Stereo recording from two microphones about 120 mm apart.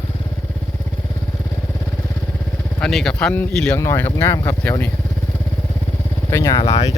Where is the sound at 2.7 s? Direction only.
5° left (ahead or behind).